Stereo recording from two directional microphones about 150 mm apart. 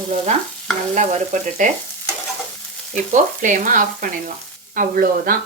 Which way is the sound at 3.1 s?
60° right (ahead or behind).